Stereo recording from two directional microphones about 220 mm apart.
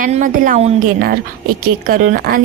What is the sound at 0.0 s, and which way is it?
A woman's voice, 35° right (ahead or behind).